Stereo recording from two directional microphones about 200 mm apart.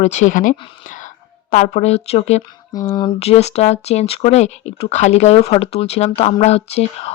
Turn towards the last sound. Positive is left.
turn(degrees=30)  # may be behind; listen again after turning